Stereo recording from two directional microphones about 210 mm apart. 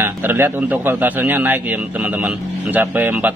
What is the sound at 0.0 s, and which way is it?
A man's voice, 10° right (ahead or behind).